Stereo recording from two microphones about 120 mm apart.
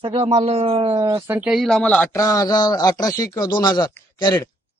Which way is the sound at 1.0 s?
30° right (ahead or behind).